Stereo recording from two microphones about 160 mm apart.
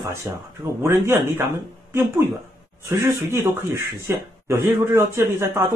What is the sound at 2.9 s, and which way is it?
Speech, 15° right (ahead or behind).